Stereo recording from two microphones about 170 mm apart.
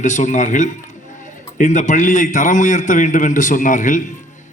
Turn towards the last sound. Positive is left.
turn(degrees=50)  # may be behind; listen again after turning